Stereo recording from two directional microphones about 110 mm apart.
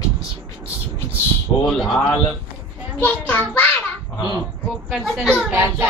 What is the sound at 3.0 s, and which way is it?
Speech, 15° left (ahead or behind).